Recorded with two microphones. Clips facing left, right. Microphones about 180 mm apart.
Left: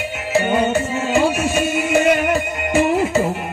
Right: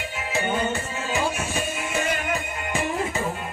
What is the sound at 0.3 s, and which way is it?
Music, 70° left (ahead or behind).